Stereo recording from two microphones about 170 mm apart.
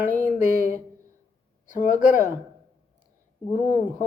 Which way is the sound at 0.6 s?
50° left (ahead or behind).